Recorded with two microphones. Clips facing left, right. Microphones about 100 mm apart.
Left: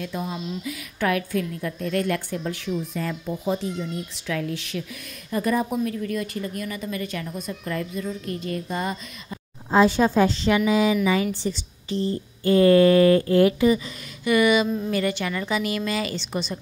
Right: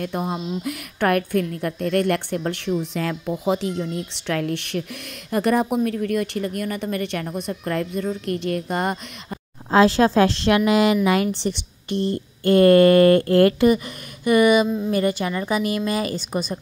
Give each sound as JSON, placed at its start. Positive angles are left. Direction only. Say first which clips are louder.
{"t": 0.0, "sound": "a woman's voice", "louder": "right 4 dB", "side_deg": -50}
{"t": 2.8, "sound": "a woman's voice", "louder": "right 3 dB", "side_deg": -75}
{"t": 4.3, "sound": "a woman's voice", "louder": "right 4 dB", "side_deg": -60}
{"t": 14.2, "sound": "a sound", "louder": "right 3 dB", "side_deg": -45}
{"t": 14.9, "sound": "a woman's voice", "louder": "right 3 dB", "side_deg": -40}